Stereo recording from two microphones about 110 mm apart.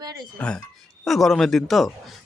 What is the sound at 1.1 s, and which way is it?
Speech, centre (ahead or behind).